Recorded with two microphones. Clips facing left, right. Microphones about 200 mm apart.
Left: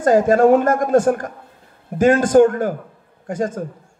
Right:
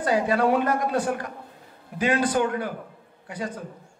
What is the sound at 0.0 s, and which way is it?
A man's voice, 45° left (ahead or behind).